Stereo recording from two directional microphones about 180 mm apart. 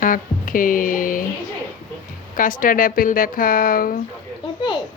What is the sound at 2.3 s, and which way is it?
Speech, 50° left (ahead or behind).